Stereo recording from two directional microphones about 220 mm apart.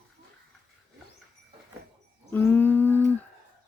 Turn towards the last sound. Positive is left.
turn(degrees=10)  # may be behind; listen again after turning